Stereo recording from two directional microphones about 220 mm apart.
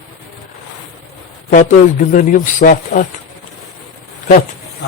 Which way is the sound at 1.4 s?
40° left (ahead or behind).